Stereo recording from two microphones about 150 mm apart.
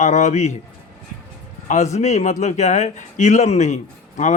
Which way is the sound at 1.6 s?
50° left (ahead or behind).